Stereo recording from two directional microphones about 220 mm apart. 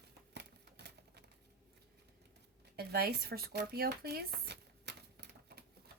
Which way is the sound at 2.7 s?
45° right (ahead or behind).